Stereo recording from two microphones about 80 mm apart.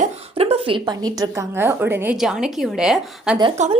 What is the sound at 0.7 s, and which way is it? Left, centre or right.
Speech, right.